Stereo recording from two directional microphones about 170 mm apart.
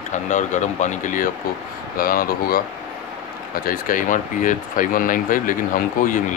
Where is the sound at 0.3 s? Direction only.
45° left (ahead or behind).